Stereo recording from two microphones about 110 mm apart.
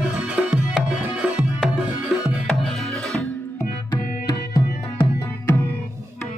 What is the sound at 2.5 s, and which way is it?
Music, 5° left (ahead or behind).